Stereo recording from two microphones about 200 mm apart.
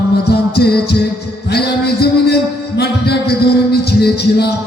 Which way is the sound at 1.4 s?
55° left (ahead or behind).